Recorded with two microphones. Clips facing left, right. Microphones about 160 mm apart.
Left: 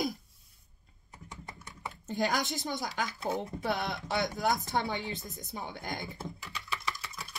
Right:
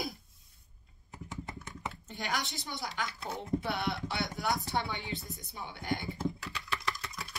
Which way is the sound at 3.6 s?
45° left (ahead or behind).